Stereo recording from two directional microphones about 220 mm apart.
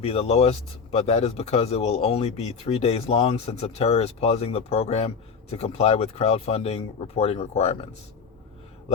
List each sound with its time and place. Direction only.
0.0 s speech: 30° left (ahead or behind)